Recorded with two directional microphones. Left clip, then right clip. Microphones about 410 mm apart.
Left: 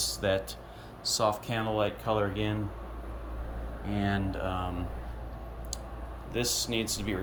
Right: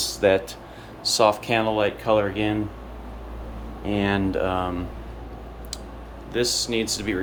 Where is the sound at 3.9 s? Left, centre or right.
Centre.